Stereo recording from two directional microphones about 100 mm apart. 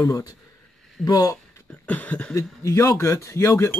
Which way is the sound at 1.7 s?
15° left (ahead or behind).